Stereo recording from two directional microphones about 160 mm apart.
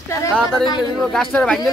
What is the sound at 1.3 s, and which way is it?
Speech, 5° left (ahead or behind).